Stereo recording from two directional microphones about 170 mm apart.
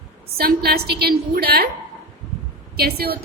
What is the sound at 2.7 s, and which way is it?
Speech, 65° right (ahead or behind).